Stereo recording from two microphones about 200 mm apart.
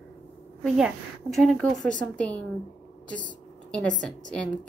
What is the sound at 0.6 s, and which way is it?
A woman's voice, centre (ahead or behind).